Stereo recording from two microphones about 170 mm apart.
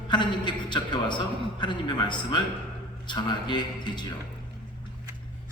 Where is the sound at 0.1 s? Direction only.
25° left (ahead or behind).